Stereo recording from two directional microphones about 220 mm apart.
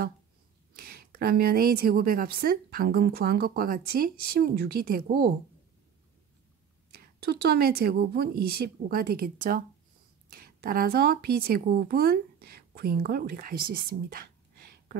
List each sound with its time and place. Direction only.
0.7 s a woman's voice: 40° right (ahead or behind)
6.9 s a woman's voice: 45° right (ahead or behind)